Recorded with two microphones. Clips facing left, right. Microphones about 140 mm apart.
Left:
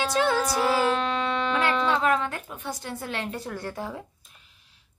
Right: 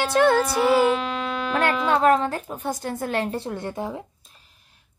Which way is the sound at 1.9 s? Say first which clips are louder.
Right 5 dB; 45° right (ahead or behind).